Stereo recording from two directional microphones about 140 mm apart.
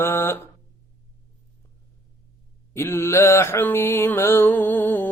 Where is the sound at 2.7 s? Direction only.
15° left (ahead or behind).